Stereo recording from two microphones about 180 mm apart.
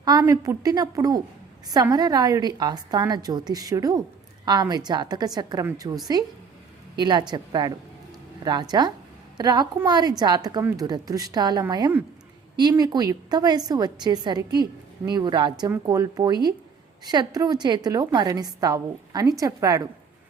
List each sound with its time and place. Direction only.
0.0 s a woman's voice: 20° right (ahead or behind)
7.0 s a woman's voice: 25° right (ahead or behind)